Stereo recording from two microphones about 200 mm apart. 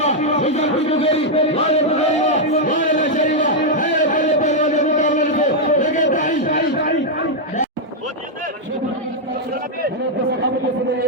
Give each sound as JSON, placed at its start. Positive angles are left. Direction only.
{"t": 0.0, "sound": "speech", "side_deg": 35}
{"t": 2.5, "sound": "music", "side_deg": 40}
{"t": 3.9, "sound": "a sound", "side_deg": 40}